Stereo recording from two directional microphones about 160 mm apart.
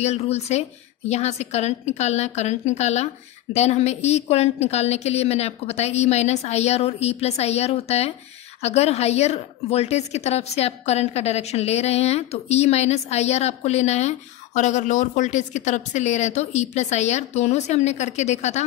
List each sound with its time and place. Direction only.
0.0 s a woman's voice: 40° left (ahead or behind)